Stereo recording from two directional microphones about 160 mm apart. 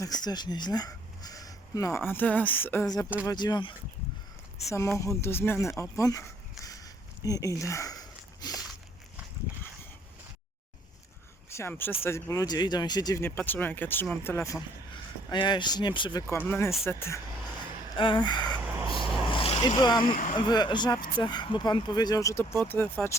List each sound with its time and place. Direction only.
0.0 s speech: 25° left (ahead or behind)
2.8 s speech: 25° left (ahead or behind)
4.9 s speech: 15° left (ahead or behind)
6.0 s a sound: 20° left (ahead or behind)
11.4 s speech: 15° left (ahead or behind)
15.3 s speech: 30° left (ahead or behind)
16.5 s speech: 15° left (ahead or behind)
17.9 s a sound: 30° left (ahead or behind)
19.3 s speech: 35° left (ahead or behind); by 22.9 s 10° left (ahead or behind)